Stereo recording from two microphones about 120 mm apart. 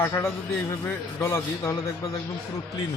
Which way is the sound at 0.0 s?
25° left (ahead or behind).